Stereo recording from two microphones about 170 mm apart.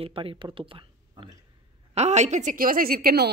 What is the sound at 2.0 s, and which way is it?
A woman's voice, 45° right (ahead or behind).